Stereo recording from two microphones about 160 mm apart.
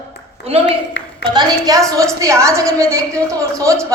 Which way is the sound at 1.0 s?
90° left.